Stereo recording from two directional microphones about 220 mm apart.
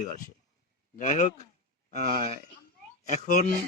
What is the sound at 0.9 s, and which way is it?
Speech, 30° left (ahead or behind).